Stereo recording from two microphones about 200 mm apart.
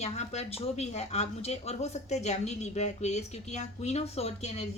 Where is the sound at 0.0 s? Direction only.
35° left (ahead or behind).